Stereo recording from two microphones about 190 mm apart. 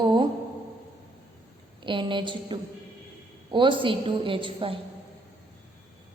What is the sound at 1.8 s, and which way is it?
A woman's voice, 25° right (ahead or behind).